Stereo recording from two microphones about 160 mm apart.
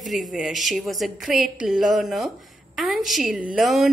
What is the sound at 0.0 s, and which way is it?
A woman's voice, centre (ahead or behind).